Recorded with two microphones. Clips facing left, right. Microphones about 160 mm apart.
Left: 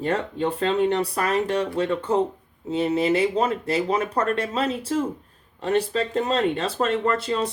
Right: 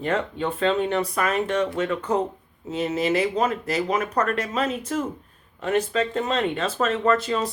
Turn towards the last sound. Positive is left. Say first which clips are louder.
# right 1 dB
turn(degrees=30)  # may be behind; listen again after turning